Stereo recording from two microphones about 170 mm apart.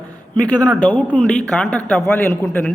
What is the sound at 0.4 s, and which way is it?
Speech, 25° right (ahead or behind).